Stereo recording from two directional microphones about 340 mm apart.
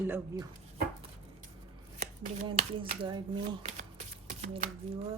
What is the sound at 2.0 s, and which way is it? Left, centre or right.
Speech, centre.